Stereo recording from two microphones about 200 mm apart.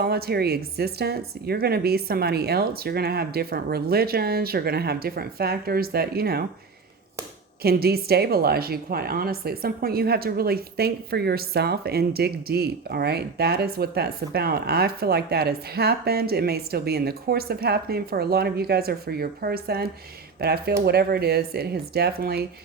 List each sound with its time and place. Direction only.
0.0 s a woman's voice: 50° right (ahead or behind)
7.6 s a woman's voice: 50° right (ahead or behind)